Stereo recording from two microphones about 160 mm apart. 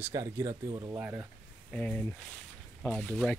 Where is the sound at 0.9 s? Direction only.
10° right (ahead or behind).